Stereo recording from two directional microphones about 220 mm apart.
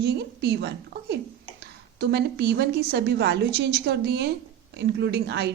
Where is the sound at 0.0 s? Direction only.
50° right (ahead or behind).